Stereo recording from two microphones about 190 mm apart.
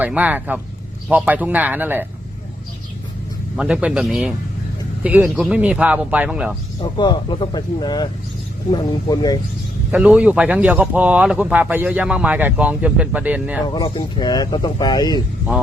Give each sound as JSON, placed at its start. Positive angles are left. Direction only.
{"t": 0.0, "sound": "speech", "side_deg": -10}
{"t": 3.6, "sound": "speech", "side_deg": -5}
{"t": 6.8, "sound": "speech", "side_deg": 25}
{"t": 9.9, "sound": "speech", "side_deg": -5}
{"t": 13.7, "sound": "speech", "side_deg": 20}